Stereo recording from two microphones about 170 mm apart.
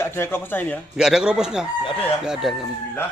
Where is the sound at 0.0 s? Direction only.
15° left (ahead or behind).